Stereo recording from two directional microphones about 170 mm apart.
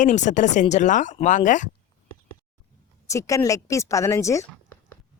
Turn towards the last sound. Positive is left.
turn(degrees=15)  # may be behind; listen again after turning